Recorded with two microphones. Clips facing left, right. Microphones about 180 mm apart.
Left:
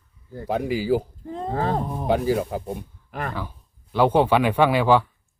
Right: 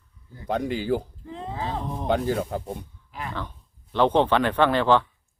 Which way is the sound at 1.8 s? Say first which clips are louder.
Left 2 dB; 5° left (ahead or behind).